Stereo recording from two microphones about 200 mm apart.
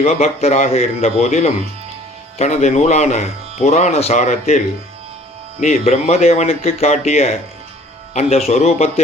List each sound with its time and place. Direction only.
0.0 s speech: 30° left (ahead or behind)